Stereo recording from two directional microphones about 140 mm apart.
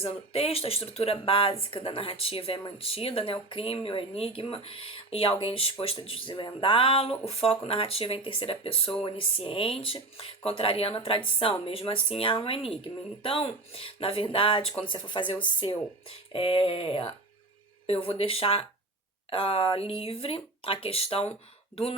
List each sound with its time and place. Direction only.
0.0 s speech: 45° left (ahead or behind)